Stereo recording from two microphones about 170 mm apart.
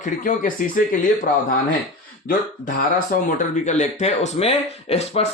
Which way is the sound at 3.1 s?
55° left (ahead or behind).